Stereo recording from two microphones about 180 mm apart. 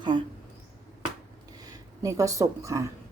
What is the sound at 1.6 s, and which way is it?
Speech, 20° right (ahead or behind).